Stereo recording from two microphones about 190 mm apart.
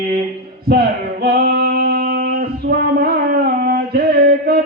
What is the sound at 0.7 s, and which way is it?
Male singing, 55° right (ahead or behind).